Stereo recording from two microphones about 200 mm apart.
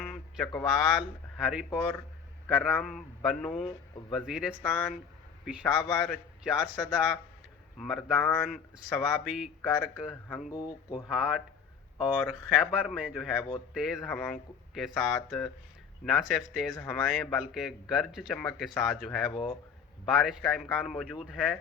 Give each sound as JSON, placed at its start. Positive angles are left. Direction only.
{"t": 0.0, "sound": "a man's voice", "side_deg": 0}
{"t": 10.5, "sound": "speech", "side_deg": 20}
{"t": 11.1, "sound": "speech", "side_deg": -5}
{"t": 19.3, "sound": "speech", "side_deg": 25}
{"t": 20.1, "sound": "speech", "side_deg": 0}